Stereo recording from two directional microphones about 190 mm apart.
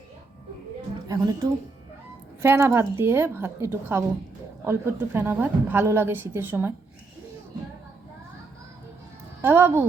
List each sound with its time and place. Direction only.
1.0 s a woman's voice: 20° right (ahead or behind)
2.4 s a woman's voice: 15° right (ahead or behind)
9.4 s a woman's voice: 10° right (ahead or behind)